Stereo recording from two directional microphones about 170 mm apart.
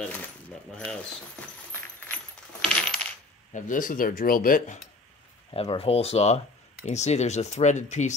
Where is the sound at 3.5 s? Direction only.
50° left (ahead or behind).